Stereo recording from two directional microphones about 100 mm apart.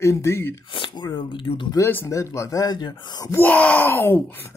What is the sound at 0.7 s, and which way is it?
Speech, 50° left (ahead or behind).